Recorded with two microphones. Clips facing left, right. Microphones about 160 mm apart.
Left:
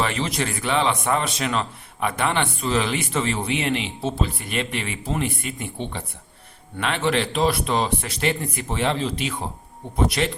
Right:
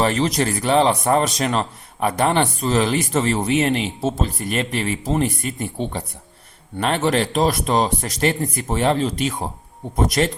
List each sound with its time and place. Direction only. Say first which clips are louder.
0.0 s a man's voice: right 5 dB; 40° right (ahead or behind)